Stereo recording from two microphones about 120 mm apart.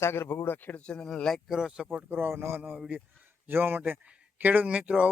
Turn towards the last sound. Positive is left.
turn(degrees=-10)  # may be behind; listen again after turning